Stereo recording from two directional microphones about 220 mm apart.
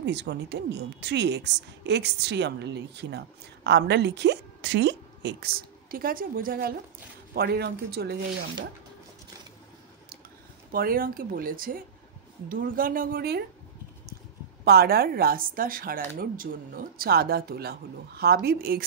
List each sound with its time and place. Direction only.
0.0 s a woman's voice: 50° right (ahead or behind)
10.7 s speech: 40° right (ahead or behind)
14.6 s a woman's voice: 45° right (ahead or behind)